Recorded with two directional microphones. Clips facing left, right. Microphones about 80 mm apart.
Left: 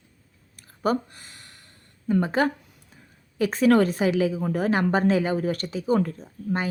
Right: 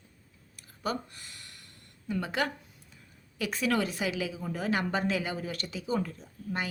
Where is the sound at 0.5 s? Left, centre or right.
Left.